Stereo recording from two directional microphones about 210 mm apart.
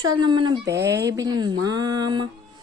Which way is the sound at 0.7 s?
55° right (ahead or behind).